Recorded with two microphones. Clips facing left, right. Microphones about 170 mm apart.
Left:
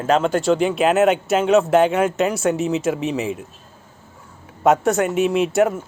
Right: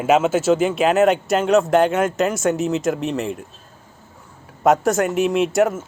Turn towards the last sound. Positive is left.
turn(degrees=0)  # may be behind; listen again after turning